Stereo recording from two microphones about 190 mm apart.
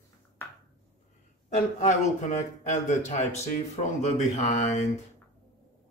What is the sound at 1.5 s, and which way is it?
A man's voice, 35° left (ahead or behind).